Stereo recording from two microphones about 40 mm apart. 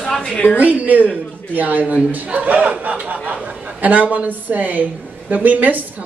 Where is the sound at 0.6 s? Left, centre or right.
Right.